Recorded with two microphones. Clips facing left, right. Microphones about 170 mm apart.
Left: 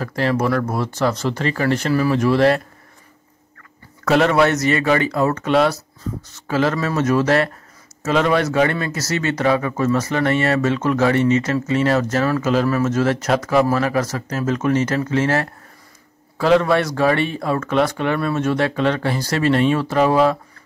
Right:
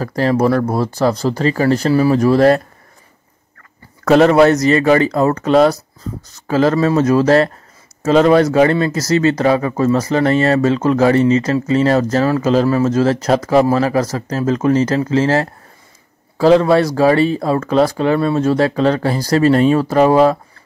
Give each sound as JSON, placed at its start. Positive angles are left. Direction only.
{"t": 0.0, "sound": "speech", "side_deg": -35}
{"t": 4.0, "sound": "speech", "side_deg": -40}